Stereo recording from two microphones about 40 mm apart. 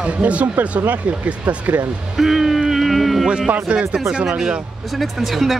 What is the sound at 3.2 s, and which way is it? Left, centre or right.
Speech, right.